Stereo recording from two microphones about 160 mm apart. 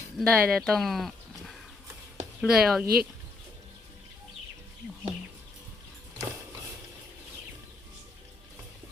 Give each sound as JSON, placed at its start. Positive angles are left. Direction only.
{"t": 0.2, "sound": "speech", "side_deg": 0}
{"t": 2.8, "sound": "speech", "side_deg": -70}